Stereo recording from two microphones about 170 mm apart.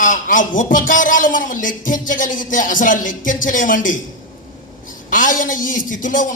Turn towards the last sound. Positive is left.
turn(degrees=50)  # may be behind; listen again after turning